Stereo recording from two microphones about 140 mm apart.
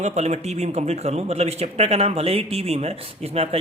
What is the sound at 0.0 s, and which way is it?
Speech, 55° right (ahead or behind).